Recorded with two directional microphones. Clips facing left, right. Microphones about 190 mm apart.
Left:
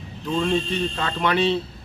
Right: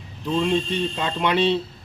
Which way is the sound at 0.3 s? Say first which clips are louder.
Right 1 dB; 10° right (ahead or behind).